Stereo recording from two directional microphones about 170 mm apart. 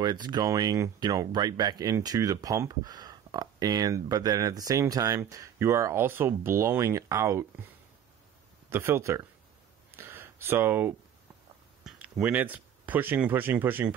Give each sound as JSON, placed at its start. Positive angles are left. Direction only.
{"t": 0.0, "sound": "speech", "side_deg": -25}
{"t": 8.6, "sound": "speech", "side_deg": -15}
{"t": 9.8, "sound": "a sound", "side_deg": -15}
{"t": 11.8, "sound": "speech", "side_deg": -10}